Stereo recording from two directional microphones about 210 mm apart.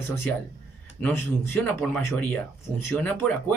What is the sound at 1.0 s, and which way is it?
Speech, 10° left (ahead or behind).